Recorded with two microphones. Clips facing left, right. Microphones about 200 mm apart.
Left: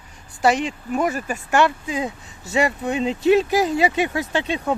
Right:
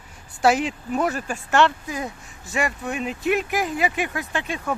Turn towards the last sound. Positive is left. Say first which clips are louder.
# left 5 dB
turn(degrees=20)  # may be behind; listen again after turning